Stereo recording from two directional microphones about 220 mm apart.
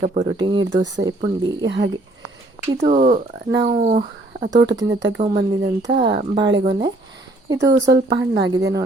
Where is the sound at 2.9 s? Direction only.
35° right (ahead or behind).